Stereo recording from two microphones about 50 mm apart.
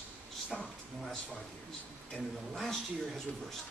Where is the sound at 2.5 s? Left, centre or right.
Centre.